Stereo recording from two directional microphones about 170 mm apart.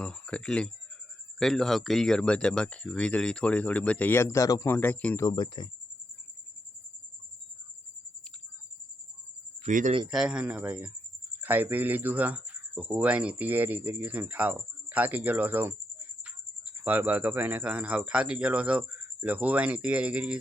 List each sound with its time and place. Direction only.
0.0 s speech: 5° left (ahead or behind)
5.2 s speech: 25° left (ahead or behind)
9.6 s speech: 45° right (ahead or behind)
10.1 s speech: 5° right (ahead or behind)
16.8 s speech: 10° right (ahead or behind)